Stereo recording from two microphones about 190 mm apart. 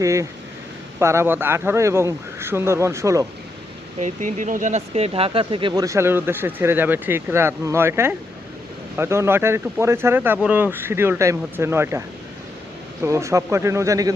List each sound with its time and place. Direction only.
0.0 s speech: 15° right (ahead or behind)
4.0 s speech: 40° right (ahead or behind); by 14.1 s 15° right (ahead or behind)